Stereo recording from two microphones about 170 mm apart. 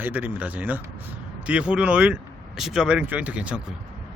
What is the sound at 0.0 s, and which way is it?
Speech, 10° right (ahead or behind).